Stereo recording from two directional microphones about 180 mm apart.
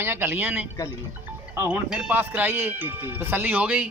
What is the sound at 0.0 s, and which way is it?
Speech, 10° right (ahead or behind).